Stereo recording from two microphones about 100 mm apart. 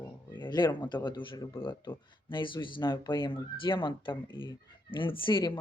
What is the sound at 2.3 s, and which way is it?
Speech, 55° left (ahead or behind).